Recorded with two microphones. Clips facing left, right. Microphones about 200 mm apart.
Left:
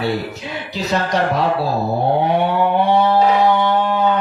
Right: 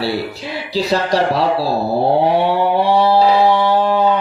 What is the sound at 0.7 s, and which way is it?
Speech, 35° right (ahead or behind).